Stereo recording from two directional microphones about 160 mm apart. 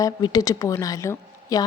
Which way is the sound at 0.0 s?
25° left (ahead or behind).